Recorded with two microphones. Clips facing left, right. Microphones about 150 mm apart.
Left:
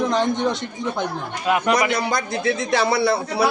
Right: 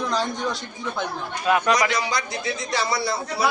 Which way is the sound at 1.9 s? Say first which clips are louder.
Left 3 dB; 55° left (ahead or behind).